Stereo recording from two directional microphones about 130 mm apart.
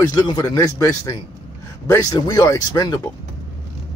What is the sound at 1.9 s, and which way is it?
A man's voice, 30° left (ahead or behind).